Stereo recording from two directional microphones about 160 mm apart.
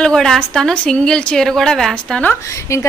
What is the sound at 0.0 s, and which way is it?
A woman's voice, 5° left (ahead or behind).